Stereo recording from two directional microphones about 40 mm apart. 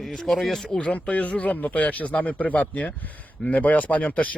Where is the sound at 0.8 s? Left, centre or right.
Left.